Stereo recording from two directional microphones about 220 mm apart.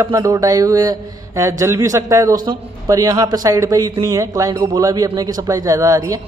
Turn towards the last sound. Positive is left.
turn(degrees=-15)  # may be behind; listen again after turning